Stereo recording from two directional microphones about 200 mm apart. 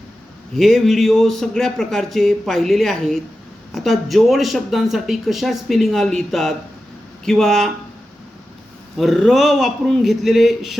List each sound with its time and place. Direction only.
0.5 s speech: centre (ahead or behind)
9.0 s speech: centre (ahead or behind)